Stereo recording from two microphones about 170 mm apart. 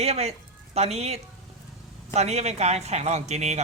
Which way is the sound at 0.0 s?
40° right (ahead or behind).